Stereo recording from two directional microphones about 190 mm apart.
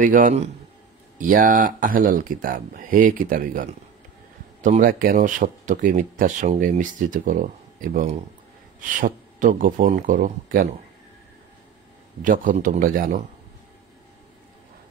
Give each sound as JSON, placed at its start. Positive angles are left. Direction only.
{"t": 0.0, "sound": "speech", "side_deg": -45}
{"t": 12.2, "sound": "speech", "side_deg": -45}